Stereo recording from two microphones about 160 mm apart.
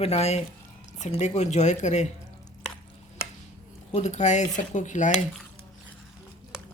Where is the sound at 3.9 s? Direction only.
45° left (ahead or behind).